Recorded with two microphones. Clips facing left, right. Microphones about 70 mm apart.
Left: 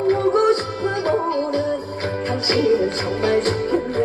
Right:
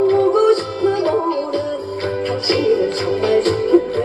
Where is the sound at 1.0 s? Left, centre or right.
Left.